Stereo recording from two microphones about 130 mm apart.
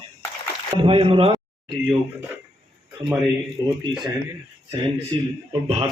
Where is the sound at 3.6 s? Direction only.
20° right (ahead or behind).